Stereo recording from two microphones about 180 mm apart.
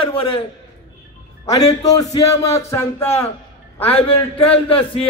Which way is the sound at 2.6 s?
15° left (ahead or behind).